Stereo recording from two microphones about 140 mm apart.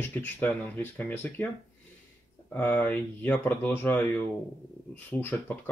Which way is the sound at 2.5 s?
10° left (ahead or behind).